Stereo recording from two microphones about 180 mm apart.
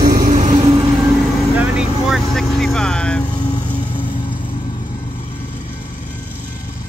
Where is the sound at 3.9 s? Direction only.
25° left (ahead or behind).